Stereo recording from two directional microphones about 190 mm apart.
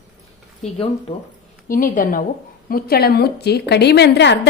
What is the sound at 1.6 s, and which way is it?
A woman's voice, 45° left (ahead or behind).